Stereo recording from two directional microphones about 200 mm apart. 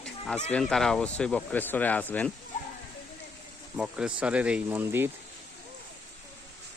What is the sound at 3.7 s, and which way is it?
Speech, 5° right (ahead or behind).